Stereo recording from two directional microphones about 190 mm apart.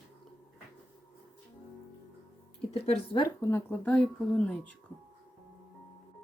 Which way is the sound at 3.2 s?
15° left (ahead or behind).